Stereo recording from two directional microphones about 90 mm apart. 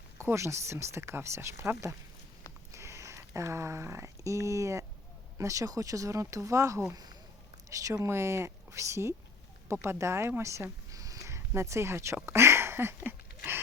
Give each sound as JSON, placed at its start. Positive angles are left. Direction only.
{"t": 0.2, "sound": "speech", "side_deg": -30}
{"t": 6.9, "sound": "speech", "side_deg": -45}
{"t": 13.1, "sound": "a sound", "side_deg": -25}